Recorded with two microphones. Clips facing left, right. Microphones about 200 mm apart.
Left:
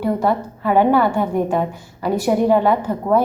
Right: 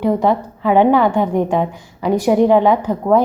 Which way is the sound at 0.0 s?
20° right (ahead or behind).